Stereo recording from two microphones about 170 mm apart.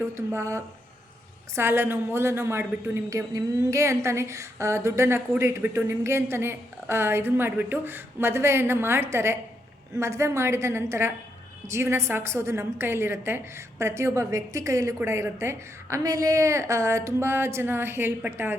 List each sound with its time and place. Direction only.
0.0 s a woman's voice: 15° right (ahead or behind)